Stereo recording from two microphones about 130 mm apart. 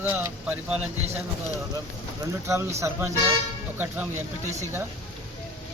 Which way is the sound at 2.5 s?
20° right (ahead or behind).